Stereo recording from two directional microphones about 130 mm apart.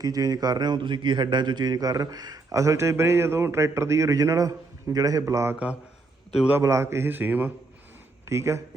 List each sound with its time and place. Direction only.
0.0 s a man's voice: 30° right (ahead or behind)
6.6 s a man's voice: 25° right (ahead or behind)